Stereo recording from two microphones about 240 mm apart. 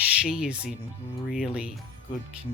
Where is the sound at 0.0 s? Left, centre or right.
Centre.